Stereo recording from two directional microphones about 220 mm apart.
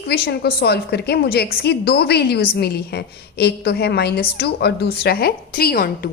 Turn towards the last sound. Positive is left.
turn(degrees=40)  # may be behind; listen again after turning